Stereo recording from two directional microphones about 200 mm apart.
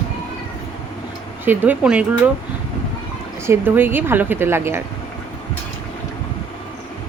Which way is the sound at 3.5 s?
10° right (ahead or behind).